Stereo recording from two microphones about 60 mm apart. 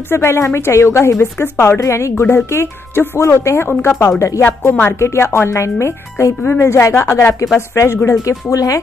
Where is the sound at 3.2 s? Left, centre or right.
Left.